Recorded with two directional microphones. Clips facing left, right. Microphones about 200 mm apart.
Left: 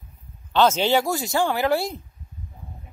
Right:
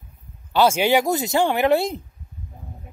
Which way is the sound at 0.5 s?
10° right (ahead or behind).